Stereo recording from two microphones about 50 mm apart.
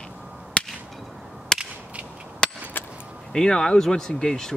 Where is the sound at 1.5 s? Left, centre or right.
Centre.